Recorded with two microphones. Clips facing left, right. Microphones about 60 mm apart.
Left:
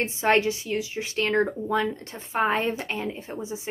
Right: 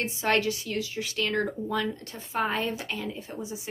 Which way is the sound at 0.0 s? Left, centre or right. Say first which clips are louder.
Left 4 dB; left.